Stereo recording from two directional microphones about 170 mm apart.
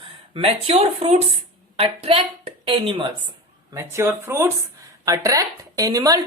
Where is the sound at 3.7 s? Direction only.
15° right (ahead or behind).